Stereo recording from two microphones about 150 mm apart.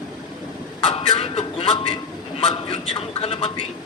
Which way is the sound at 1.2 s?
40° left (ahead or behind).